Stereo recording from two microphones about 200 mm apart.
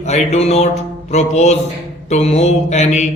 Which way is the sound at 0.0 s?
35° left (ahead or behind).